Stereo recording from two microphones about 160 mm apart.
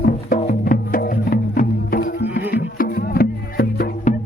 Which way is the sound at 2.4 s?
75° left (ahead or behind).